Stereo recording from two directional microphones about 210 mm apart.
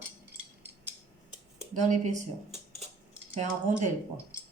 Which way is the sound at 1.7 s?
35° right (ahead or behind).